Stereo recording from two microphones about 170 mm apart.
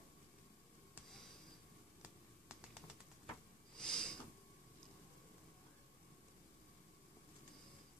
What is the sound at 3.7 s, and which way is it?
Snort, 5° left (ahead or behind).